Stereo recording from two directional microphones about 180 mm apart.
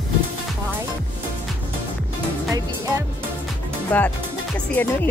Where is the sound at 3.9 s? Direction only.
10° left (ahead or behind).